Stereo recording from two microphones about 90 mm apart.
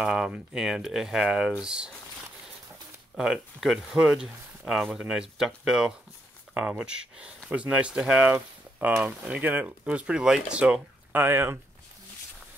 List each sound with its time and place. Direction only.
0.0 s speech: 10° right (ahead or behind)
3.2 s speech: 10° right (ahead or behind); by 11.6 s 25° right (ahead or behind)